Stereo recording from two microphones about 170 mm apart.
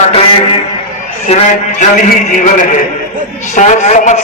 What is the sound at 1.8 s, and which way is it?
Speech, 50° left (ahead or behind).